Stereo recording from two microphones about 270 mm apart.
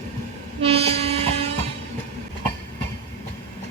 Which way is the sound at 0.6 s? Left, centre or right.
Right.